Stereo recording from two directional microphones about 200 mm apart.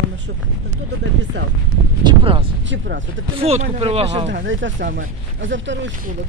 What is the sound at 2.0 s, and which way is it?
Speech, 25° right (ahead or behind).